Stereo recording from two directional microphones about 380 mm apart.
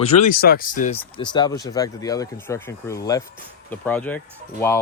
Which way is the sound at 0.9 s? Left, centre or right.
Centre.